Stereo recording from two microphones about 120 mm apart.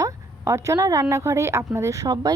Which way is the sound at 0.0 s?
25° right (ahead or behind).